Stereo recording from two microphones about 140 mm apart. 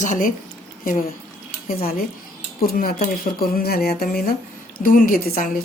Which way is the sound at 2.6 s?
90° left.